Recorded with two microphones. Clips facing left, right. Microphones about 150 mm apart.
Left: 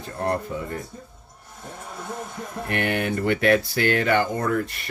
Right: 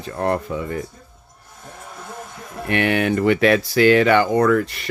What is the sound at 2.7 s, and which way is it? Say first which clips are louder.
Speech: right 6 dB; 90° right.